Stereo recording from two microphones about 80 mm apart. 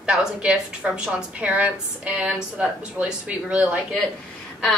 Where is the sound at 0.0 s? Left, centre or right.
Centre.